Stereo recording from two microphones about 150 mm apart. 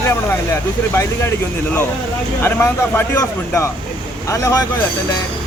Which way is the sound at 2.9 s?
15° left (ahead or behind).